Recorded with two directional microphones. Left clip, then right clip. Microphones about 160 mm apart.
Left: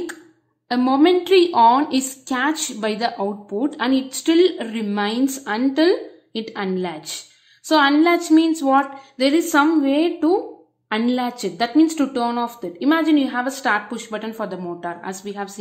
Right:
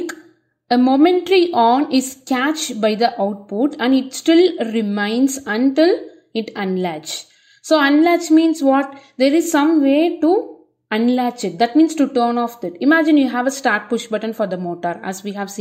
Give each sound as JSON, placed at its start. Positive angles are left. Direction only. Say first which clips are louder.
{"t": 0.7, "sound": "a woman's voice", "louder": "right 3 dB", "side_deg": -20}